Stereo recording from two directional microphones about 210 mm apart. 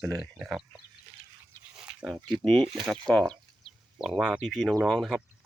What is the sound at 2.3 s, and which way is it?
Speech, centre (ahead or behind).